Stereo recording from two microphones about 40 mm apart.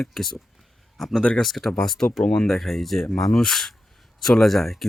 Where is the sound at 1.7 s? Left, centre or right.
Centre.